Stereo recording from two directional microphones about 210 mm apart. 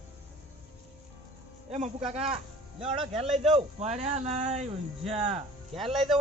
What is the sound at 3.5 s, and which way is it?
Speech, 30° right (ahead or behind).